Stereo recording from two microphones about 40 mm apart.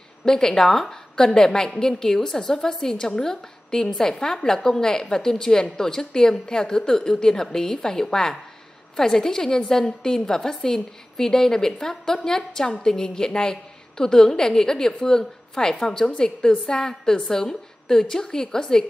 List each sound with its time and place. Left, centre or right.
0.2 s a woman's voice: centre